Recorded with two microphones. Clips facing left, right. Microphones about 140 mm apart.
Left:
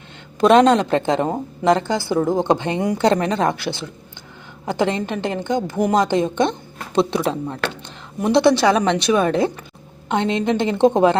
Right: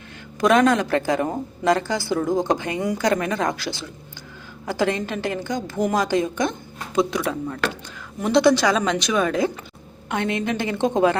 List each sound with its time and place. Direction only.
0.3 s a woman's voice: 25° left (ahead or behind)